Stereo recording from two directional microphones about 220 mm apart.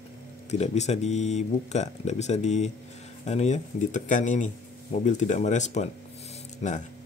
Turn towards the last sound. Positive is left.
turn(degrees=30)  # may be behind; listen again after turning